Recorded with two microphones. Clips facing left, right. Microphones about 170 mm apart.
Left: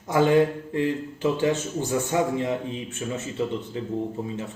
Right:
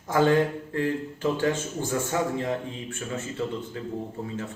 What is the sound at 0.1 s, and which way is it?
A man's voice, 15° left (ahead or behind).